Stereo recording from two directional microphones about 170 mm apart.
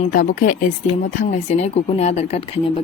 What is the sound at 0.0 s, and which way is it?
Speech, 50° left (ahead or behind).